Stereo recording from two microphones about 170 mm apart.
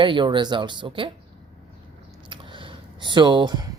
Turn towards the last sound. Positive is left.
turn(degrees=-25)  # may be behind; listen again after turning